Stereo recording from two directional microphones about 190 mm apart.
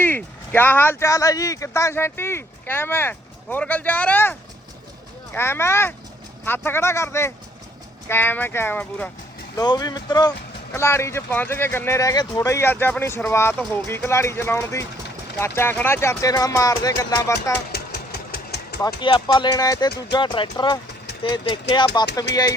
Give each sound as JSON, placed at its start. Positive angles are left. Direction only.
{"t": 0.0, "sound": "speech", "side_deg": 10}
{"t": 9.6, "sound": "speech", "side_deg": 20}
{"t": 17.7, "sound": "engine", "side_deg": 55}
{"t": 18.8, "sound": "speech", "side_deg": 25}